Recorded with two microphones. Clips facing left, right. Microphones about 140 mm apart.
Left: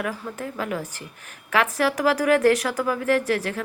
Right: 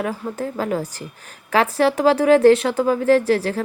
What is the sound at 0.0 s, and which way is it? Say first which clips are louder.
Speech: right 5 dB; 30° right (ahead or behind).